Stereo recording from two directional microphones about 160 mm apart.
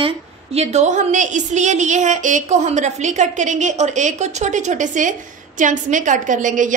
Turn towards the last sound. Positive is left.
turn(degrees=-55)  # may be behind; listen again after turning